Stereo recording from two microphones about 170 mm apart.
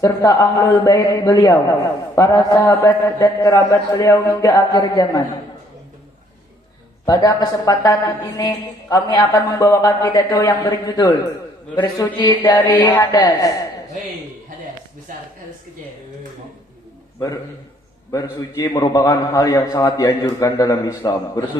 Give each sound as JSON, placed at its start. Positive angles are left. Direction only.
{"t": 0.0, "sound": "a man's voice", "side_deg": 20}
{"t": 7.0, "sound": "a man's voice", "side_deg": 20}
{"t": 12.7, "sound": "speech", "side_deg": 10}
{"t": 13.0, "sound": "a man's voice", "side_deg": 25}
{"t": 18.1, "sound": "a man's voice", "side_deg": 20}